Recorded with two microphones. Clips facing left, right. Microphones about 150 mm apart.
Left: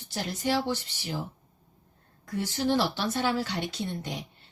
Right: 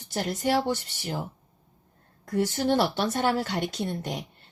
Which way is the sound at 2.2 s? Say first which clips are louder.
Right 3 dB; 50° right (ahead or behind).